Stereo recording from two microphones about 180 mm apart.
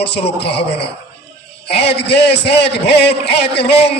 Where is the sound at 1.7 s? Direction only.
65° left (ahead or behind).